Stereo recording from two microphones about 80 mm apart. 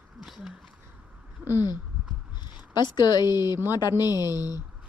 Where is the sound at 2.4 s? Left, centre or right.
Left.